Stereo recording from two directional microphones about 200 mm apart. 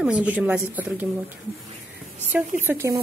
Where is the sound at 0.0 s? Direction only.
5° right (ahead or behind).